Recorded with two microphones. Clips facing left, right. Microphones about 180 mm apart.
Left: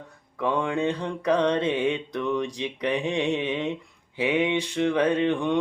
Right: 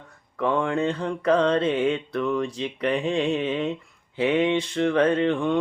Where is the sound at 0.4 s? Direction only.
15° left (ahead or behind).